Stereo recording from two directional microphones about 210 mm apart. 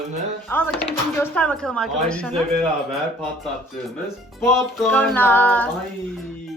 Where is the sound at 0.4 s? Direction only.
10° left (ahead or behind).